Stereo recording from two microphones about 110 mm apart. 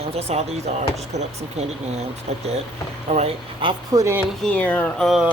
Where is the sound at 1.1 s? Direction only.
90° right.